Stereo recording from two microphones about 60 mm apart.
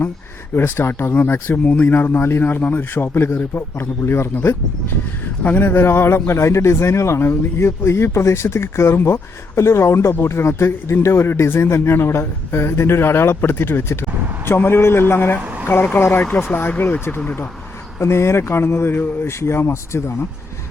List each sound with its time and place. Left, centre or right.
0.5 s speech: left
5.4 s speech: left
18.0 s speech: left